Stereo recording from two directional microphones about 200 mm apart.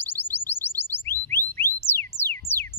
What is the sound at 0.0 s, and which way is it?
Chirp tone, 10° left (ahead or behind).